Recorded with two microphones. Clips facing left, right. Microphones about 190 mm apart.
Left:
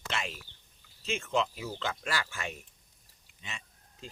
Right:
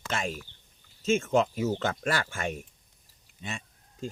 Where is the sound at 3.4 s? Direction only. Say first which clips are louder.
Right 8 dB; 45° right (ahead or behind).